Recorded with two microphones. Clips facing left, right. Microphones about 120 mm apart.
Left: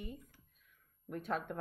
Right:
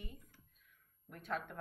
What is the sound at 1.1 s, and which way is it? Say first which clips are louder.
Speech: left 4 dB; 15° left (ahead or behind).